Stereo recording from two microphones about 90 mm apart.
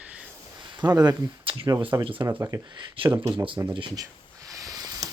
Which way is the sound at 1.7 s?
65° right (ahead or behind).